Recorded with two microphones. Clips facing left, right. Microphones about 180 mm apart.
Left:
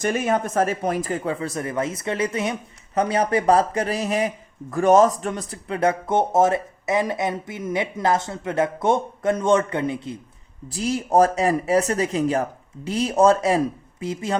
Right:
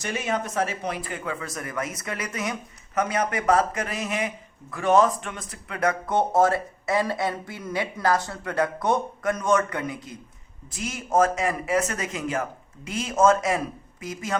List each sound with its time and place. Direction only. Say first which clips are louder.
0.0 s speech: left 6 dB; 50° left (ahead or behind); by 14.3 s 30° left (ahead or behind)